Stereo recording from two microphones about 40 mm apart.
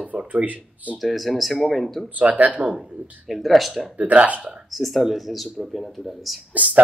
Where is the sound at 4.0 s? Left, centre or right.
Right.